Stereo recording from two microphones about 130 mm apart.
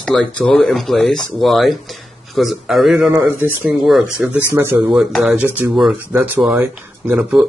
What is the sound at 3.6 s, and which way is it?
Speech, centre (ahead or behind).